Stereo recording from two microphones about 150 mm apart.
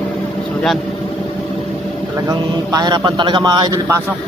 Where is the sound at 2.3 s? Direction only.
25° right (ahead or behind).